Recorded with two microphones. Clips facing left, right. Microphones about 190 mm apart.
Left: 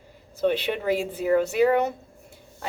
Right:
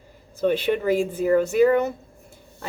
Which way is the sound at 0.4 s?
45° right (ahead or behind).